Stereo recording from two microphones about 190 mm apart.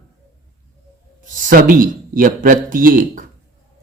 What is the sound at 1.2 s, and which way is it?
Speech, 45° right (ahead or behind).